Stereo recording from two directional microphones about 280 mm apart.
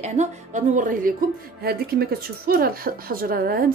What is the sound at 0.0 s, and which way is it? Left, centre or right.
A woman's voice, right.